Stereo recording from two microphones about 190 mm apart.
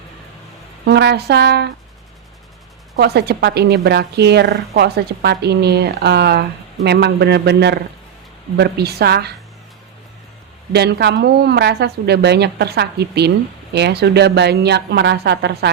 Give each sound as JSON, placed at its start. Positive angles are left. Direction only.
{"t": 0.9, "sound": "a woman's voice", "side_deg": -60}
{"t": 2.9, "sound": "a woman's voice", "side_deg": -60}
{"t": 10.7, "sound": "a woman's voice", "side_deg": -60}